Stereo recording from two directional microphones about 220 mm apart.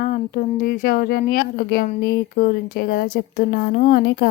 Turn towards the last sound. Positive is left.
turn(degrees=45)  # may be behind; listen again after turning